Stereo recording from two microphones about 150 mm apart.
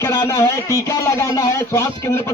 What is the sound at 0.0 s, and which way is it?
Speech, 20° left (ahead or behind).